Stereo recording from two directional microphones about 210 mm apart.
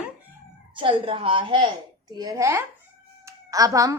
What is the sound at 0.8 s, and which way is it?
A woman's voice, 25° right (ahead or behind).